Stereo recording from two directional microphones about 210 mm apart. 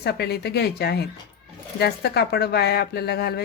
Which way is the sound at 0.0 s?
50° left (ahead or behind).